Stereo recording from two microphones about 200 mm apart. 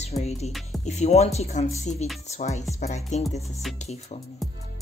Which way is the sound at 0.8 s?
35° left (ahead or behind).